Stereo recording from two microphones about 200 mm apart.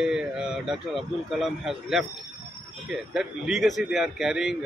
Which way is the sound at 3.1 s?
Centre (ahead or behind).